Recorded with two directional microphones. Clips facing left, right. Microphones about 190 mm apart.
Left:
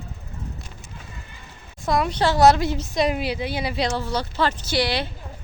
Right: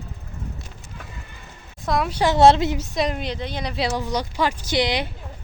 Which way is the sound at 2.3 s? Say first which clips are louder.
Right 2 dB; 25° right (ahead or behind).